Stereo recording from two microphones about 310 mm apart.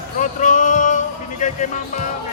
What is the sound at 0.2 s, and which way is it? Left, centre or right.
Music, left.